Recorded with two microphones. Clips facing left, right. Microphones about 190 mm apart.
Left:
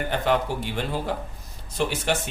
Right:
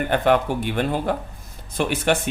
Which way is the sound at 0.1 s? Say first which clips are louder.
Right 5 dB; 55° right (ahead or behind).